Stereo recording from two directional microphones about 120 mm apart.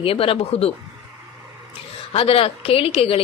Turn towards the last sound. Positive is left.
turn(degrees=50)  # may be behind; listen again after turning